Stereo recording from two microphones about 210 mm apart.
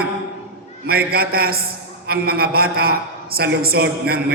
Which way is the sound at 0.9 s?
45° right (ahead or behind).